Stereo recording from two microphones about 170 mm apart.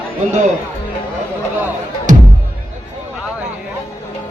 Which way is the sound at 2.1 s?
50° right (ahead or behind).